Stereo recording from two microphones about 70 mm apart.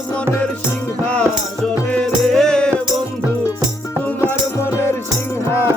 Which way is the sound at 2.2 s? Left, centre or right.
Centre.